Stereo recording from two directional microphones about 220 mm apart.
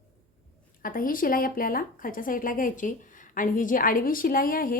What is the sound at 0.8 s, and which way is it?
Speech, 40° left (ahead or behind).